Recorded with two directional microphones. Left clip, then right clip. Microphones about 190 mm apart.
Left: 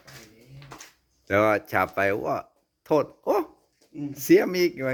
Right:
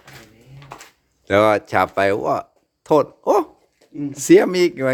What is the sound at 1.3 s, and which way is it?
Speech, 15° right (ahead or behind).